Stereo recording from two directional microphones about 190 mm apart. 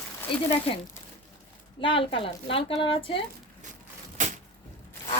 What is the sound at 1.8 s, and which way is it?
A woman's voice, 25° left (ahead or behind).